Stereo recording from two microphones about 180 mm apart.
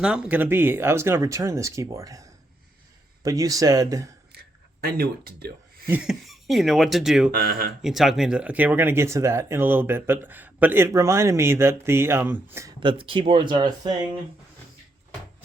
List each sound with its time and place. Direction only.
0.0 s speech: 5° right (ahead or behind)
3.2 s speech: 20° right (ahead or behind)
4.8 s speech: 60° right (ahead or behind)
5.9 s speech: 5° right (ahead or behind)
7.3 s speech: 60° right (ahead or behind)
7.8 s speech: centre (ahead or behind)
12.8 s speech: 30° right (ahead or behind)